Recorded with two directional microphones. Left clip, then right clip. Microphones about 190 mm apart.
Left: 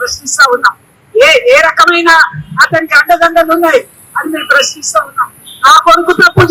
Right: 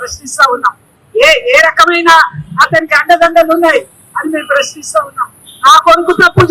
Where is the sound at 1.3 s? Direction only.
15° right (ahead or behind).